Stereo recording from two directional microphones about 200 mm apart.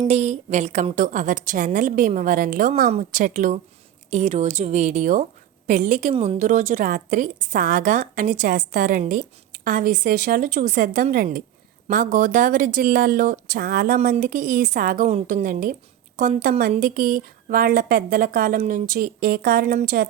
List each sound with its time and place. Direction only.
0.1 s a woman's voice: 35° right (ahead or behind)
15.0 s a woman's voice: 35° right (ahead or behind)